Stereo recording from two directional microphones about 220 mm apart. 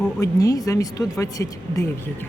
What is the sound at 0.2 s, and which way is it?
Speech, 15° left (ahead or behind).